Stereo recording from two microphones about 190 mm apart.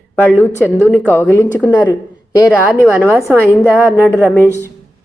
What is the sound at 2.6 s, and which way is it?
A woman's voice, 5° right (ahead or behind).